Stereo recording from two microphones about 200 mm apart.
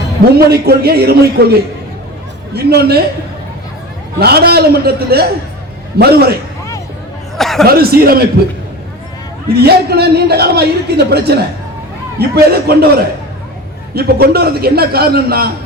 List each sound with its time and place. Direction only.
0.3 s a man's voice: 50° right (ahead or behind)
4.2 s a man's voice: 50° right (ahead or behind)
7.3 s speech: centre (ahead or behind)
7.7 s a man's voice: 50° right (ahead or behind)
9.6 s a man's voice: 50° right (ahead or behind)